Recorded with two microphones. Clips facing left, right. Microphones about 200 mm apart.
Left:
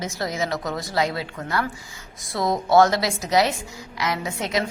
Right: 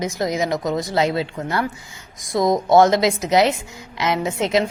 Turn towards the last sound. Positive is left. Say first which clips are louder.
# right 6 dB
turn(degrees=-25)  # may be behind; listen again after turning